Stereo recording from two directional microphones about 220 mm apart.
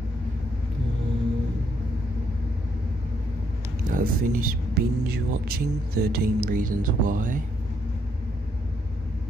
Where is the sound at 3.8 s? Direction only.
40° right (ahead or behind).